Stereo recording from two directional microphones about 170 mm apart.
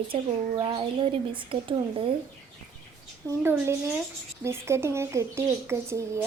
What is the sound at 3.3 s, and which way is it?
Speech, 15° right (ahead or behind).